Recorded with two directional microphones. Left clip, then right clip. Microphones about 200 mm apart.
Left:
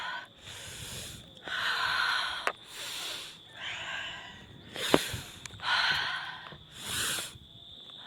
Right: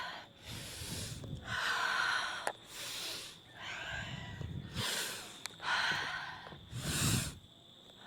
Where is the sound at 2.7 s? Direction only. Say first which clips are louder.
Left 4 dB; 20° left (ahead or behind).